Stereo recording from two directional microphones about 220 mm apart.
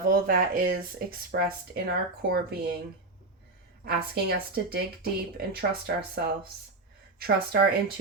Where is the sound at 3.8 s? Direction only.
45° right (ahead or behind).